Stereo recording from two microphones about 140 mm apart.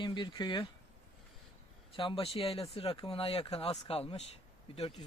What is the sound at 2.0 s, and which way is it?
Speech, 40° left (ahead or behind).